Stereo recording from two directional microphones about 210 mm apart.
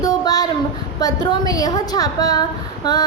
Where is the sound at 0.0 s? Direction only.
20° left (ahead or behind).